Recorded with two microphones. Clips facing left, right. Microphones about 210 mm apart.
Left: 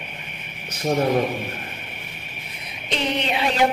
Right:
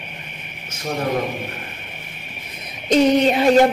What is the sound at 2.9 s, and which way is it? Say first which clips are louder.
Speech: right 10 dB; 45° right (ahead or behind).